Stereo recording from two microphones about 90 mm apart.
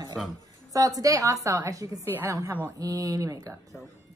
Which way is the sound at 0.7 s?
40° right (ahead or behind).